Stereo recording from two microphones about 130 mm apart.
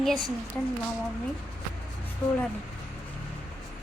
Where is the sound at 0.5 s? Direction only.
15° left (ahead or behind).